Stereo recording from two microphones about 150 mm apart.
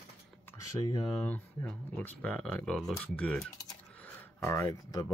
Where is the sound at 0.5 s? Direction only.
25° left (ahead or behind).